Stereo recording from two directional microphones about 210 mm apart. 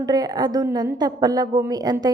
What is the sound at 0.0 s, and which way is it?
A woman's voice, 20° right (ahead or behind).